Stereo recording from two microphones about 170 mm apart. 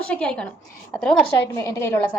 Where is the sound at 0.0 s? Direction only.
5° left (ahead or behind).